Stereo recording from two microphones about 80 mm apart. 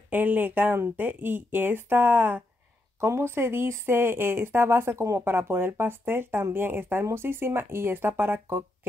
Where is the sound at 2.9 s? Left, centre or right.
Right.